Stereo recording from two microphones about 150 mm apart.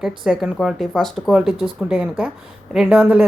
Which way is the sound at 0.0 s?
5° right (ahead or behind).